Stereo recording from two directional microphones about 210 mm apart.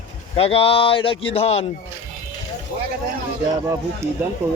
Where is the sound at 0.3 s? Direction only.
25° left (ahead or behind).